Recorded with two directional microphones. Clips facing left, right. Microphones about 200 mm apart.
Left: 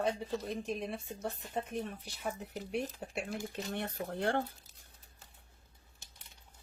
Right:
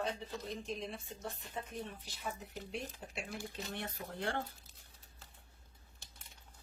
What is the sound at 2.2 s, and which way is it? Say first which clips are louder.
Speech: left 4 dB; 55° left (ahead or behind).